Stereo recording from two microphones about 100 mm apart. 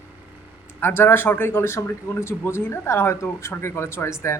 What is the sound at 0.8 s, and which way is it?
Speech, 20° left (ahead or behind).